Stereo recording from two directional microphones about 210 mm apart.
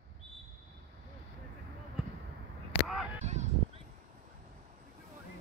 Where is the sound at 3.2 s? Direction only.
30° right (ahead or behind).